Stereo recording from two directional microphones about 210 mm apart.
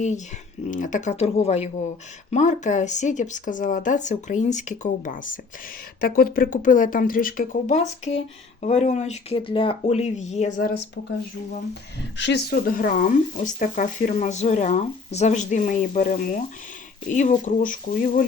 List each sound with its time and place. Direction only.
0.7 s speech: 40° left (ahead or behind)
11.7 s speech: 55° left (ahead or behind); by 18.3 s 40° left (ahead or behind)